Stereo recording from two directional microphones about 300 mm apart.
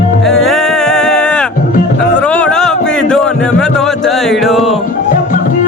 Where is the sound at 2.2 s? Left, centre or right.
Centre.